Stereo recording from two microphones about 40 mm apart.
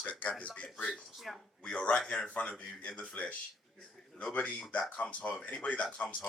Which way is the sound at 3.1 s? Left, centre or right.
Left.